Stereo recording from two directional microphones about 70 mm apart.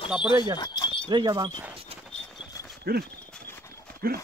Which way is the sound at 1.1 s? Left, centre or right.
Right.